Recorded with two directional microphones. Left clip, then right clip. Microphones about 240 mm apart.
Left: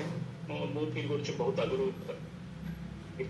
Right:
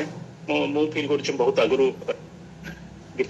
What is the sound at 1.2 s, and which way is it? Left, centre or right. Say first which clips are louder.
Speech: right 12 dB; right.